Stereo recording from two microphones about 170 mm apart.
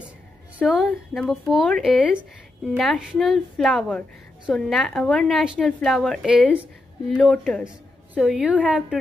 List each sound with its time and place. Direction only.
0.6 s a woman's voice: 5° right (ahead or behind)